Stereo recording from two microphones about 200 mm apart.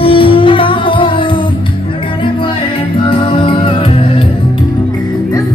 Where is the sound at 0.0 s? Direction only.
25° left (ahead or behind).